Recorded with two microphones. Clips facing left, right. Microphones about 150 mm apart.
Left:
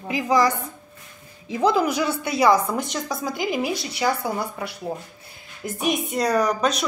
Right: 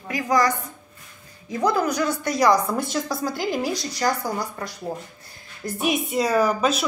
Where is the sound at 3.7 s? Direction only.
60° left (ahead or behind).